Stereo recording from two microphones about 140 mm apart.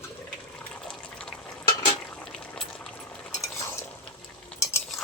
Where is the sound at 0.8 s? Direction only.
5° left (ahead or behind).